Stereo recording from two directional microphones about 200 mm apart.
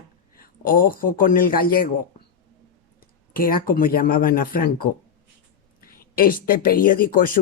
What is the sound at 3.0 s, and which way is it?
Speech, 45° left (ahead or behind).